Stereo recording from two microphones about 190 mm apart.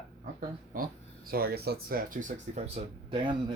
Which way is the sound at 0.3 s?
50° right (ahead or behind).